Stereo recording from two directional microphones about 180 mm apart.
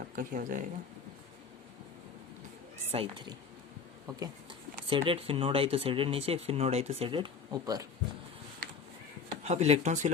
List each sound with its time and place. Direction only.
0.0 s speech: 50° right (ahead or behind)
2.9 s speech: 30° right (ahead or behind)
4.9 s speech: 30° right (ahead or behind)
9.3 s speech: 35° right (ahead or behind)